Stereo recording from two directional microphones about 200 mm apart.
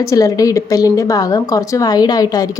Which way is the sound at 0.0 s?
15° left (ahead or behind).